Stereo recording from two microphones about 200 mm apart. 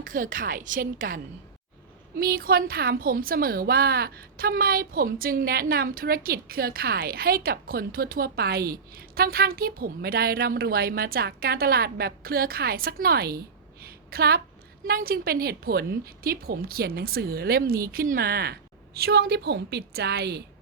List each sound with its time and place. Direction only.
0.0 s a woman's voice: 40° right (ahead or behind)
13.8 s a sound: 50° right (ahead or behind)
14.8 s a woman's voice: 50° right (ahead or behind)